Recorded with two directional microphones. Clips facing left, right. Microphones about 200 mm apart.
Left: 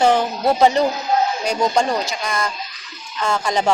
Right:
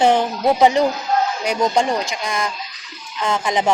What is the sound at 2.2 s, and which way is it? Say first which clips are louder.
Speech: even; 15° right (ahead or behind).